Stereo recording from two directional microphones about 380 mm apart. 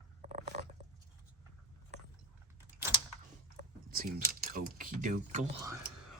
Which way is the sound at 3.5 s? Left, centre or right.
Right.